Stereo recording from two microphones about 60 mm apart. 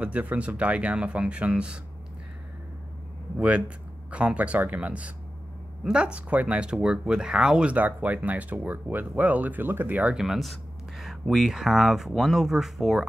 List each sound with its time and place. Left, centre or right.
0.0 s speech: right
3.3 s speech: centre
7.7 s speech: right
10.1 s speech: centre